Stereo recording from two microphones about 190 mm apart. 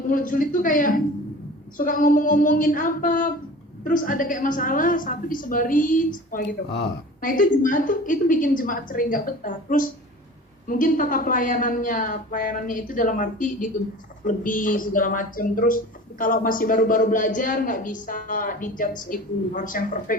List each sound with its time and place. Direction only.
0.1 s speech: 45° left (ahead or behind)